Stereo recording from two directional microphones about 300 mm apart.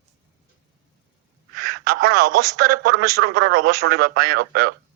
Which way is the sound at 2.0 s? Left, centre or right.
Right.